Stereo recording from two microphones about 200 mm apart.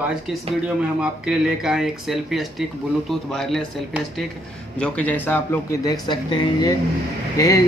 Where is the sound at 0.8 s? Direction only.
5° right (ahead or behind).